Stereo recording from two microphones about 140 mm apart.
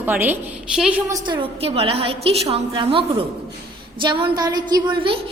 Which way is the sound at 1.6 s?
45° right (ahead or behind).